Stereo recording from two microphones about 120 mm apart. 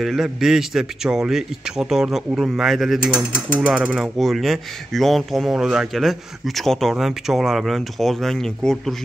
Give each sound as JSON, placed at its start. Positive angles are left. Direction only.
{"t": 0.0, "sound": "speech", "side_deg": -5}